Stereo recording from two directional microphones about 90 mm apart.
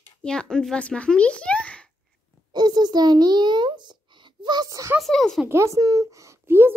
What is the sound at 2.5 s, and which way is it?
A child's voice, 50° right (ahead or behind).